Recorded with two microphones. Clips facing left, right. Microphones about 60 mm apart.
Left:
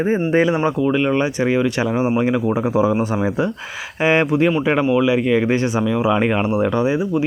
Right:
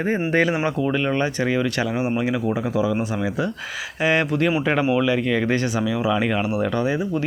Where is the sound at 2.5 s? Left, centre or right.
Left.